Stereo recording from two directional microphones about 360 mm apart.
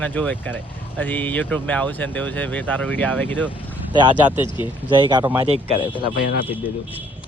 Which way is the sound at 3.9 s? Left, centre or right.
Centre.